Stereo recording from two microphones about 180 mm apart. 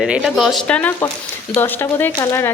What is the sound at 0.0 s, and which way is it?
Speech, centre (ahead or behind).